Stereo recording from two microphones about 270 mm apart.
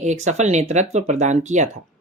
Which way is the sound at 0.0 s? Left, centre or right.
Right.